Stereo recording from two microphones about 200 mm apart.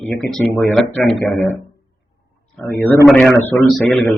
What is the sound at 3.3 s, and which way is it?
Speech, 15° left (ahead or behind).